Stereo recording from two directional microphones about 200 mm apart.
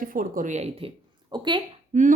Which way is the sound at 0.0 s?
45° right (ahead or behind).